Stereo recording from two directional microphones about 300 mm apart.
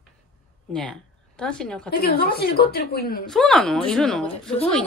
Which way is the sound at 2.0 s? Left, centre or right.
Left.